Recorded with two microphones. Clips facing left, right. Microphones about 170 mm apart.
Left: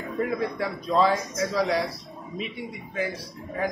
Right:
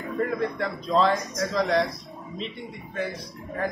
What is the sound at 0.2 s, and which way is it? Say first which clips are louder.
A man's voice: even; 5° left (ahead or behind).